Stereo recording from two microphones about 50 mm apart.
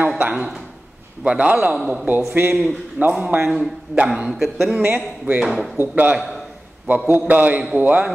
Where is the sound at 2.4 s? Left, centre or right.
Right.